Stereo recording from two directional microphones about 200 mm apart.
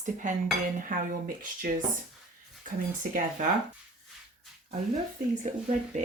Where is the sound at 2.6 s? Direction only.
40° right (ahead or behind).